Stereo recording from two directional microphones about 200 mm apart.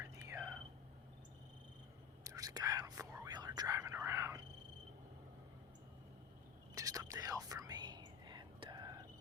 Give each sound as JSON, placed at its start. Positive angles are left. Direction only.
{"t": 0.0, "sound": "whispering", "side_deg": -15}
{"t": 2.2, "sound": "whispering", "side_deg": -15}
{"t": 6.7, "sound": "whispering", "side_deg": -15}